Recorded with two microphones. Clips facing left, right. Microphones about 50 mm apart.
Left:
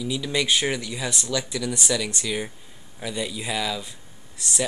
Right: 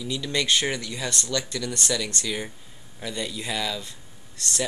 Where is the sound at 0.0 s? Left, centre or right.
Centre.